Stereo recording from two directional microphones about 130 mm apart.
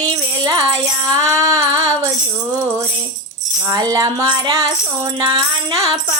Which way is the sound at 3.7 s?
25° right (ahead or behind).